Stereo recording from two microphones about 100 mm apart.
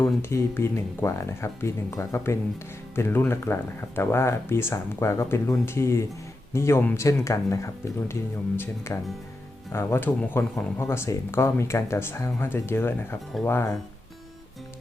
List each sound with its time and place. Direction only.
0.2 s speech: 25° left (ahead or behind)